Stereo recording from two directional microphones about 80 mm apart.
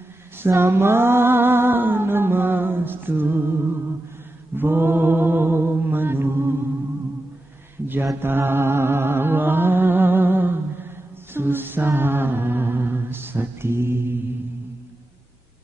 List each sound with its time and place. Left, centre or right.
0.4 s music: right
4.6 s a sound: right
8.2 s music: right
11.3 s a capella: right